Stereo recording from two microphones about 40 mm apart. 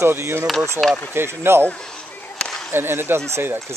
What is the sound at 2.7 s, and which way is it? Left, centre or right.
Speech, right.